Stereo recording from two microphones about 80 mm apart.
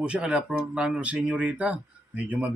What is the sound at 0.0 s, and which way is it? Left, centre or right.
A man's voice, centre.